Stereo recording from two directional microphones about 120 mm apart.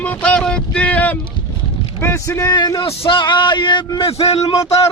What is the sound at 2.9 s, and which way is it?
A man's voice, 45° left (ahead or behind).